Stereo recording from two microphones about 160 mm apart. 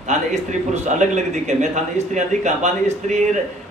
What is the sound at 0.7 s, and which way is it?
A man's voice, 45° right (ahead or behind).